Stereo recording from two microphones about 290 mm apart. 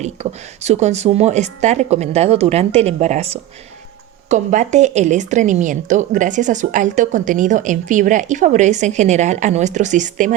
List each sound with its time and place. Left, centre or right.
0.0 s a woman's voice: right